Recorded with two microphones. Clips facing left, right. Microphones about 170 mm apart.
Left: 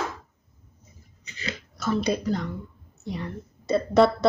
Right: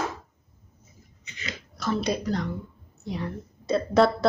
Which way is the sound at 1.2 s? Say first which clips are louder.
Left 4 dB; 35° left (ahead or behind).